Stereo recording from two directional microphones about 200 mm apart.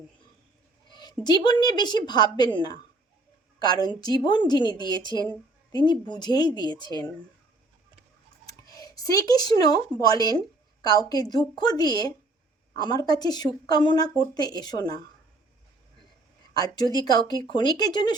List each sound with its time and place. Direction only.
0.9 s a sound: 20° left (ahead or behind)
1.2 s speech: 20° left (ahead or behind)
3.6 s speech: 20° left (ahead or behind)
8.6 s speech: 20° left (ahead or behind)
16.6 s speech: 20° left (ahead or behind)